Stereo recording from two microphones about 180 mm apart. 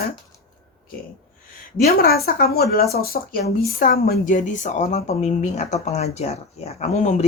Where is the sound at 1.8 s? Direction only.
60° left (ahead or behind).